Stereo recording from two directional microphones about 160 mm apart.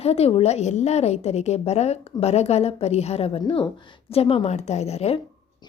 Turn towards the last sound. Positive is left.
turn(degrees=40)  # may be behind; listen again after turning